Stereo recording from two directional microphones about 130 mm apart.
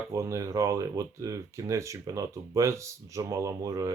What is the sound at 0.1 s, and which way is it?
Speech, 25° right (ahead or behind).